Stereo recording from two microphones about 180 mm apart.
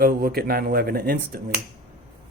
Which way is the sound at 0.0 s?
55° right (ahead or behind).